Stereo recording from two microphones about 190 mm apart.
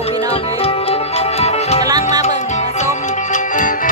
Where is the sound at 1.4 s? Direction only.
35° left (ahead or behind).